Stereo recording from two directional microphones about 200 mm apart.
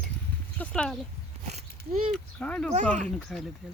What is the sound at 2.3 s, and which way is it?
Speech, 5° left (ahead or behind).